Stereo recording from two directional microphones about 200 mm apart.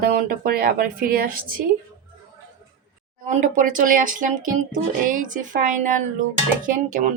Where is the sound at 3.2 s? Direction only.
40° right (ahead or behind).